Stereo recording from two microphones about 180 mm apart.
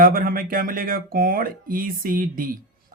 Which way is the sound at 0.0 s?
55° right (ahead or behind).